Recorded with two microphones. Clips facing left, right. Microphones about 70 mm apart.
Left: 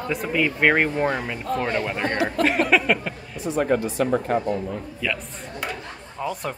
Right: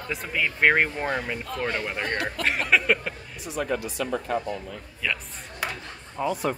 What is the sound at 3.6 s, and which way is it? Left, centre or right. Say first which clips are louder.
Speech: left 7 dB; left.